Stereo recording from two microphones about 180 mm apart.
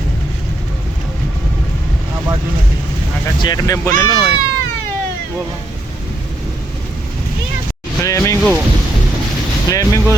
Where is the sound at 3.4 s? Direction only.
20° left (ahead or behind).